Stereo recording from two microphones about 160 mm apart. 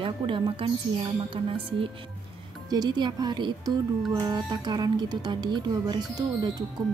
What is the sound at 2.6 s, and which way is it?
Speech, 25° right (ahead or behind).